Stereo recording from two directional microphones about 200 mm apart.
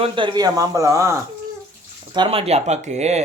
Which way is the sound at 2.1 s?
25° right (ahead or behind).